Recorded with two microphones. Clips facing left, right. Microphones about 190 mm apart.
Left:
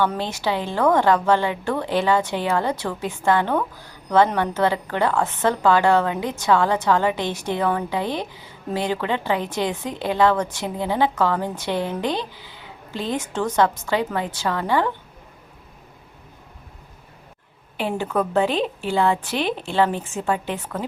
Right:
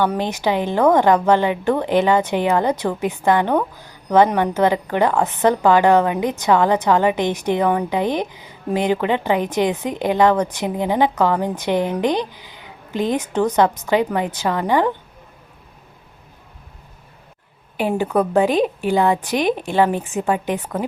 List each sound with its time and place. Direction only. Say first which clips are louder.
0.0 s a woman's voice: right 3 dB; 15° right (ahead or behind)
17.7 s a woman's voice: right 4 dB; 10° right (ahead or behind)